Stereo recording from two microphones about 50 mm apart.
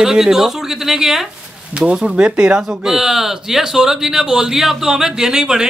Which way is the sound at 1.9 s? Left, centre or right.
Right.